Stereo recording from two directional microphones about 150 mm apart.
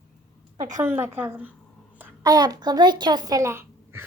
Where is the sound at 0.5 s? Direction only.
25° right (ahead or behind).